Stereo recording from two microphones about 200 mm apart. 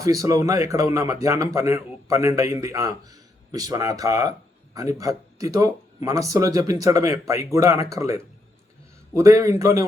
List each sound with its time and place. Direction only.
0.0 s speech: 15° right (ahead or behind)